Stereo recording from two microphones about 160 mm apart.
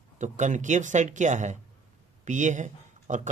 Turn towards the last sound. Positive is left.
turn(degrees=-50)  # may be behind; listen again after turning